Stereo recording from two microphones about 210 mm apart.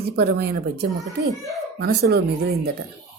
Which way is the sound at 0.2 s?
50° right (ahead or behind).